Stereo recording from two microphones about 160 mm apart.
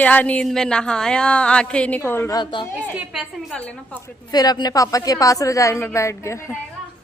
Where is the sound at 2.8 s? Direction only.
5° right (ahead or behind).